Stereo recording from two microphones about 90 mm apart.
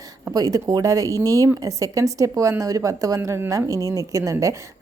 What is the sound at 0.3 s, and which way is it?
A woman's voice, 45° right (ahead or behind).